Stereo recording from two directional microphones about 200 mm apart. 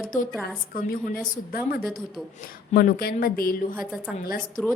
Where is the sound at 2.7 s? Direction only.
45° left (ahead or behind).